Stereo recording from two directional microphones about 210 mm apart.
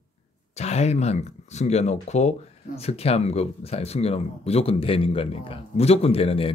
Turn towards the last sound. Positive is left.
turn(degrees=25)  # may be behind; listen again after turning